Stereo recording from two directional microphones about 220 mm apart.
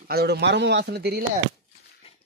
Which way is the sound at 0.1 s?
45° right (ahead or behind).